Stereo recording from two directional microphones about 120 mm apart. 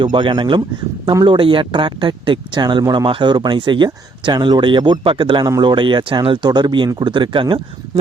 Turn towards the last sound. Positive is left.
turn(degrees=-45)  # may be behind; listen again after turning